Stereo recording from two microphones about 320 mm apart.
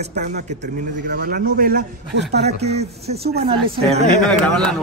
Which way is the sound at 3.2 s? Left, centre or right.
Right.